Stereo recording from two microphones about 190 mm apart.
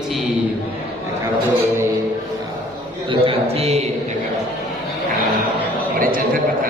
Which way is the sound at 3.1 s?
30° right (ahead or behind).